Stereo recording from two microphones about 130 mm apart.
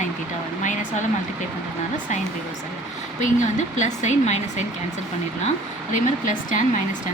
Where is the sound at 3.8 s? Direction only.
65° left (ahead or behind).